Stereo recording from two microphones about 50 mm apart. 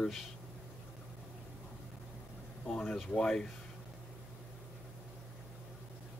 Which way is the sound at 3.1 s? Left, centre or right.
Centre.